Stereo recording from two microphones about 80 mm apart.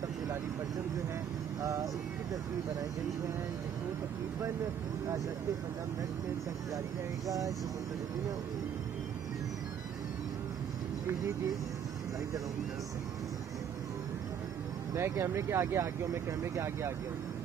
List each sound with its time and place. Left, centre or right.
1.6 s speech: right
7.2 s speech: right
15.0 s speech: right